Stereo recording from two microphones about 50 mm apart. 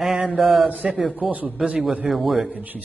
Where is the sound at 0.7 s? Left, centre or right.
Right.